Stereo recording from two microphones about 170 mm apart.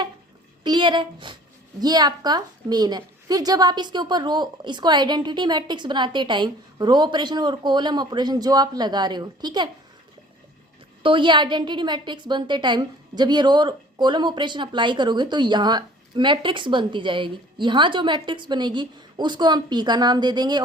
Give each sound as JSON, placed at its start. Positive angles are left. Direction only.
{"t": 0.6, "sound": "a woman's voice", "side_deg": -25}
{"t": 11.0, "sound": "a woman's voice", "side_deg": -30}